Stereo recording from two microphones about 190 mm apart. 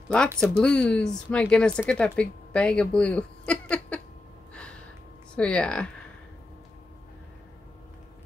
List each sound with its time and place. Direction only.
0.4 s speech: 5° left (ahead or behind)
5.3 s speech: 5° left (ahead or behind)